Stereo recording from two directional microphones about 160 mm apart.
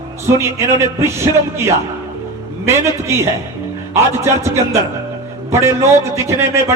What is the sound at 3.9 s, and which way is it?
A man's voice, 15° right (ahead or behind).